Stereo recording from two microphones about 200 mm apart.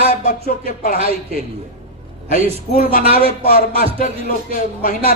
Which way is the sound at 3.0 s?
30° right (ahead or behind).